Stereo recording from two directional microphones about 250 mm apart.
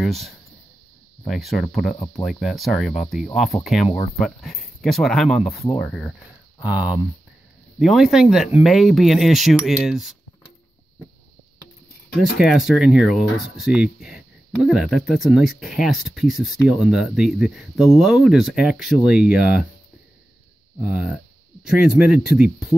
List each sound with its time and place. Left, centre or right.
0.0 s speech: centre
6.6 s speech: centre
12.2 s speech: centre
21.6 s speech: centre